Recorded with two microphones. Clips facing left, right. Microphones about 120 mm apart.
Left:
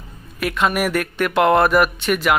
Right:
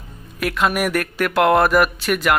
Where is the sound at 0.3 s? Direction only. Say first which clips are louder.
Even; centre (ahead or behind).